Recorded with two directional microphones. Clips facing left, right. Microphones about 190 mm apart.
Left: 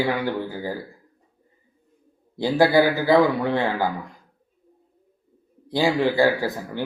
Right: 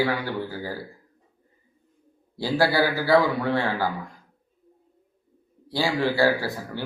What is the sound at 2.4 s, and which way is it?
Speech, 20° left (ahead or behind).